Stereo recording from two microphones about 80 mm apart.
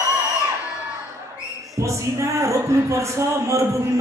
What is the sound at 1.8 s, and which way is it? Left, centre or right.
Speech, right.